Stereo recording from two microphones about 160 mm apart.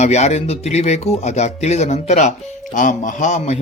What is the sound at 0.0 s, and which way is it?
A man's voice, 45° left (ahead or behind).